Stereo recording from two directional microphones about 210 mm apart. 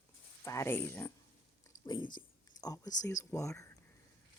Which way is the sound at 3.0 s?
15° left (ahead or behind).